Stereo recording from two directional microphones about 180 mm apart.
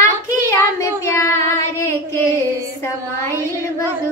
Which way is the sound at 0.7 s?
15° left (ahead or behind).